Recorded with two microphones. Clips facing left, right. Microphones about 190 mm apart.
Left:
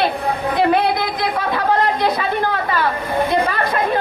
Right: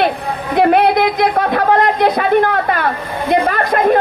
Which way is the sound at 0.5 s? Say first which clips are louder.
Right 6 dB; 55° right (ahead or behind).